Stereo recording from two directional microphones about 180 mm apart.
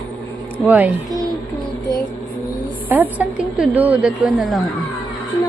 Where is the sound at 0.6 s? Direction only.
10° right (ahead or behind).